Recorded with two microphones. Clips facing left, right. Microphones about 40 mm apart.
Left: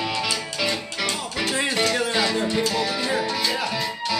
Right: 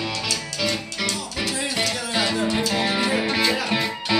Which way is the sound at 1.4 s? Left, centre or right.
Left.